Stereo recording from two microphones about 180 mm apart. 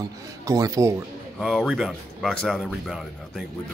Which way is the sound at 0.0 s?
20° right (ahead or behind).